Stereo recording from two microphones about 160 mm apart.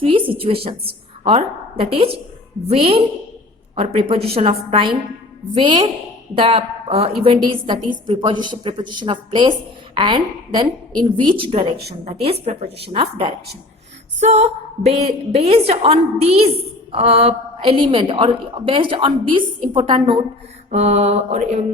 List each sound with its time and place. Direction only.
0.0 s a woman's voice: 35° right (ahead or behind)
14.2 s a woman's voice: 45° right (ahead or behind)
20.7 s mantra: 45° right (ahead or behind)